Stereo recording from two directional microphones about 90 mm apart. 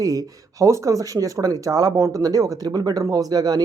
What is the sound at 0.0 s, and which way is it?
Speech, 40° right (ahead or behind).